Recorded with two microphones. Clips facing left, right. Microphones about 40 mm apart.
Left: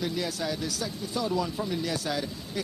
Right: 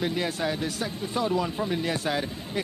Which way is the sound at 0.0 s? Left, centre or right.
Right.